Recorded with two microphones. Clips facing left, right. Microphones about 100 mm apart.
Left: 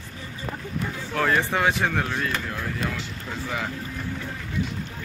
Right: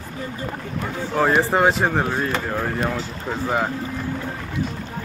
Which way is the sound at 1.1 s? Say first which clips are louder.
Right 4 dB; 20° right (ahead or behind).